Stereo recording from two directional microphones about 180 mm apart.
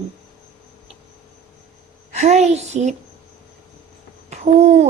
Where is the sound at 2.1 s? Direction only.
40° right (ahead or behind).